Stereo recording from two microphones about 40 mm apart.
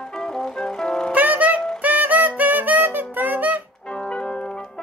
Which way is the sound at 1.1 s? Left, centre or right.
Right.